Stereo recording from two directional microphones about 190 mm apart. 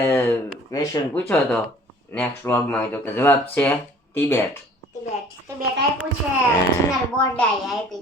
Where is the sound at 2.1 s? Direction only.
10° left (ahead or behind).